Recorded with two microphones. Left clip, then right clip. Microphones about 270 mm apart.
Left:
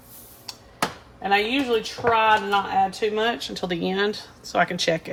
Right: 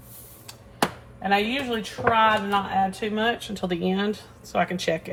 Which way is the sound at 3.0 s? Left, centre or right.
Left.